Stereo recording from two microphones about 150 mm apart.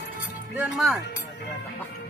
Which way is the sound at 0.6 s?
5° right (ahead or behind).